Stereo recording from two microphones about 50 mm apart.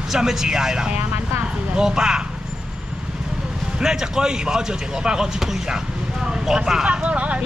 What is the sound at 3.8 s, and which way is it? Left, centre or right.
Speech, centre.